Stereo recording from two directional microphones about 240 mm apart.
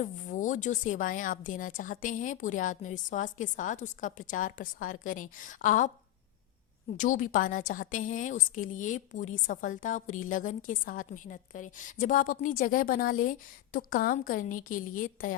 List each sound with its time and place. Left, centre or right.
0.0 s a woman's voice: left
6.9 s a woman's voice: left